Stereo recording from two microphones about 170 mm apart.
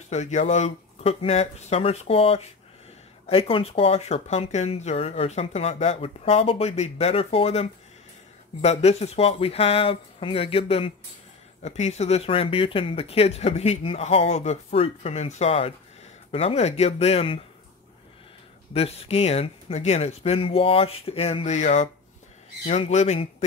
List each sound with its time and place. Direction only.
0.1 s speech: 45° left (ahead or behind)
18.7 s speech: 35° left (ahead or behind)